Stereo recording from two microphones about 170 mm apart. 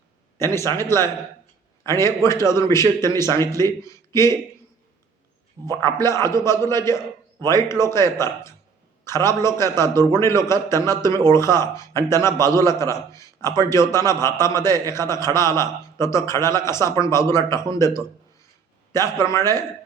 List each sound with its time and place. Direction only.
0.3 s a man's voice: 15° left (ahead or behind)
5.7 s a man's voice: 15° left (ahead or behind)
19.2 s a man's voice: 15° left (ahead or behind)